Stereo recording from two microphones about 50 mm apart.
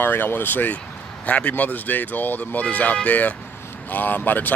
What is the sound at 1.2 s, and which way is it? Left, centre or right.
Speech, left.